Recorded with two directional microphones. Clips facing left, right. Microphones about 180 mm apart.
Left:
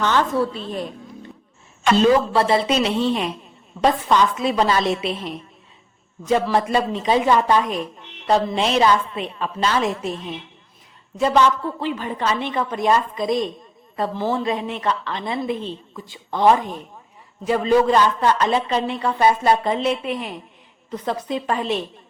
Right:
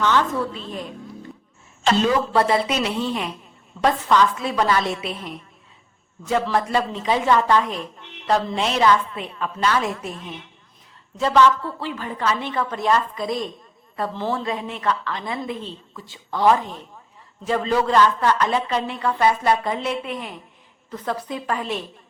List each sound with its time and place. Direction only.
0.0 s a woman's voice: 35° left (ahead or behind)
2.0 s a woman's voice: 30° left (ahead or behind)
11.2 s a woman's voice: 15° left (ahead or behind)